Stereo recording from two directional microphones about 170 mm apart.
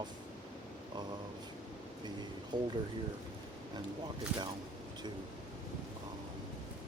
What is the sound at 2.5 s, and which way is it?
Speech, 25° right (ahead or behind).